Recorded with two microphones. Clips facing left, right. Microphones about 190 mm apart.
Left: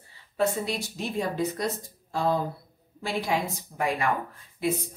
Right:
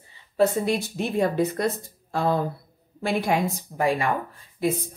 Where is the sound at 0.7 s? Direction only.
60° right (ahead or behind).